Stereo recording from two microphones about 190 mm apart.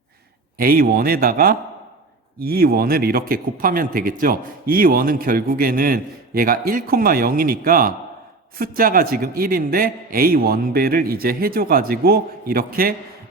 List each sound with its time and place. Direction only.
0.5 s speech: 50° right (ahead or behind)